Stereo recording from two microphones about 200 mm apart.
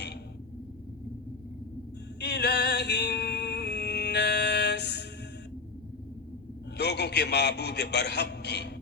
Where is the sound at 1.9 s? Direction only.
60° left (ahead or behind).